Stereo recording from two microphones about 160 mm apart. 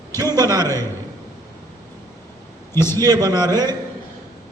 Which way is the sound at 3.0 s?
25° right (ahead or behind).